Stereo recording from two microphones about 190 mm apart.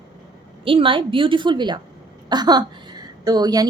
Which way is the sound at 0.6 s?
25° right (ahead or behind).